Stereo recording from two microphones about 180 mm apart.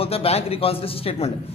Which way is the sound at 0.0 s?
35° left (ahead or behind).